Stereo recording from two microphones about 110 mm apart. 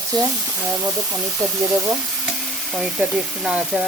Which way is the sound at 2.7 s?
5° right (ahead or behind).